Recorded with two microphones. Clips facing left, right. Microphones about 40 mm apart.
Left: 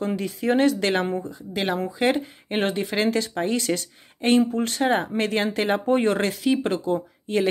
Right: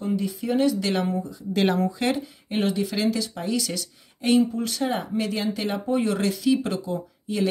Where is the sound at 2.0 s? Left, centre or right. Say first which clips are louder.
Left 3 dB; left.